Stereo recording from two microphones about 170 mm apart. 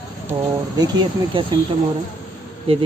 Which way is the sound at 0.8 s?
25° right (ahead or behind).